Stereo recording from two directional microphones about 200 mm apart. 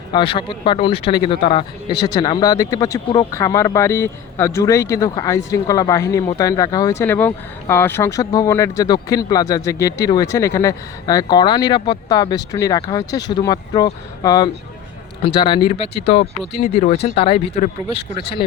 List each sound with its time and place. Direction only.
0.1 s speech: 25° left (ahead or behind)